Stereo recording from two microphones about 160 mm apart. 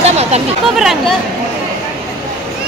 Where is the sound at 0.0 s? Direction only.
40° right (ahead or behind).